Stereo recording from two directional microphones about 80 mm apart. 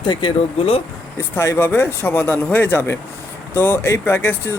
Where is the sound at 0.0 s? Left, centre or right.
Left.